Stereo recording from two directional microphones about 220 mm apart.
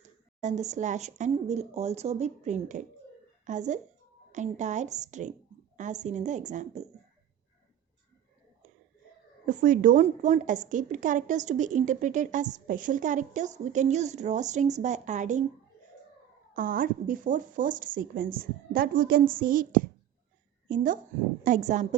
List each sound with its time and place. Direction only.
0.4 s a woman's voice: 30° right (ahead or behind)
9.5 s a woman's voice: 35° right (ahead or behind)
16.6 s a woman's voice: 40° right (ahead or behind)